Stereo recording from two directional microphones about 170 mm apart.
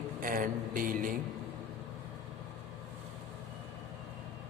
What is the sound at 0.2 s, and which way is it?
Speech, 55° right (ahead or behind).